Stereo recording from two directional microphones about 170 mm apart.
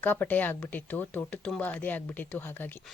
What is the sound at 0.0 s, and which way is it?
Speech, 10° left (ahead or behind).